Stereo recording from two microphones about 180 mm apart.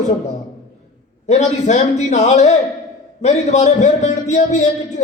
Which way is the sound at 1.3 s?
40° left (ahead or behind).